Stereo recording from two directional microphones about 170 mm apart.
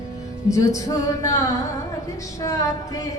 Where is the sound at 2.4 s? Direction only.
20° left (ahead or behind).